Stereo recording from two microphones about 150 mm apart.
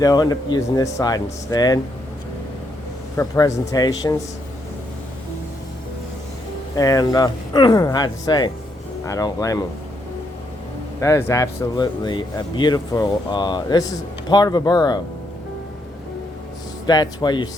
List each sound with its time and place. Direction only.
0.0 s speech: 25° left (ahead or behind)
3.2 s speech: 20° left (ahead or behind)
6.7 s speech: 25° left (ahead or behind)
11.0 s speech: 20° left (ahead or behind)
16.8 s speech: 30° left (ahead or behind)